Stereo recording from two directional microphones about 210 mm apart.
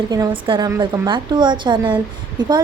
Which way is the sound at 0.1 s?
20° right (ahead or behind).